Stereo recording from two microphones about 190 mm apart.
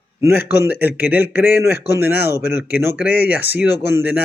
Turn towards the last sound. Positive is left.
turn(degrees=-10)  # may be behind; listen again after turning